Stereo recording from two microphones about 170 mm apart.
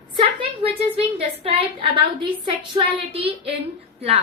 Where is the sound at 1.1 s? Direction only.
35° right (ahead or behind).